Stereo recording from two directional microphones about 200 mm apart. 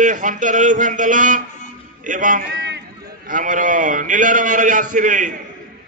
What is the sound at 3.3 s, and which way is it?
A man's voice, 40° right (ahead or behind).